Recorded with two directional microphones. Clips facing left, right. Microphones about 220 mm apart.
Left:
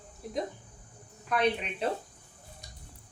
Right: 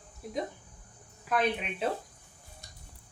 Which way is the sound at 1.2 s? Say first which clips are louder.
Left 1 dB; 5° right (ahead or behind).